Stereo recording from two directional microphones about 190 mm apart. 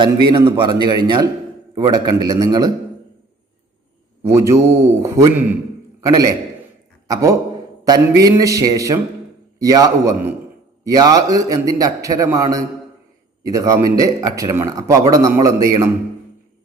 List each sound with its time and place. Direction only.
0.0 s a man's voice: 25° right (ahead or behind)
4.3 s a man's voice: 15° right (ahead or behind)